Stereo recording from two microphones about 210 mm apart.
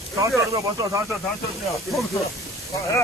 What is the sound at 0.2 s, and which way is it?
Speech, 15° right (ahead or behind).